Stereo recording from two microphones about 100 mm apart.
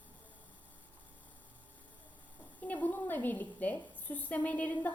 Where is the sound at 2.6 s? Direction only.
15° left (ahead or behind).